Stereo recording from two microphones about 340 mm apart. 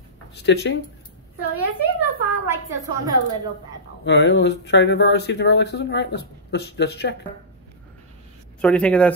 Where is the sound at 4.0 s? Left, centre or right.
Left.